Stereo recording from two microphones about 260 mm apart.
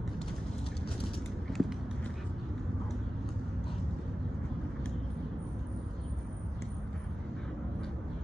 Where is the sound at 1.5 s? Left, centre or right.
Centre.